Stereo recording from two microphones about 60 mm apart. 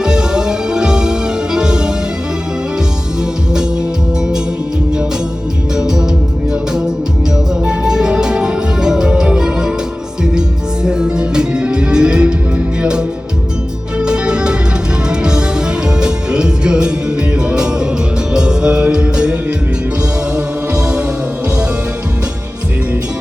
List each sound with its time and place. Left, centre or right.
0.0 s music: centre
5.7 s music: centre
7.6 s music: centre
10.8 s music: centre